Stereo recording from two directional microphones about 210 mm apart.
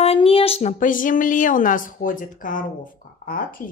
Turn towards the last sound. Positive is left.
turn(degrees=40)  # may be behind; listen again after turning